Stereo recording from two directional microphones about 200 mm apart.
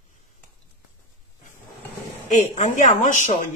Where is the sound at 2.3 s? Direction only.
35° left (ahead or behind).